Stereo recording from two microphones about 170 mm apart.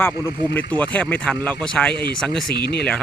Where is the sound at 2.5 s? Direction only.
70° left (ahead or behind).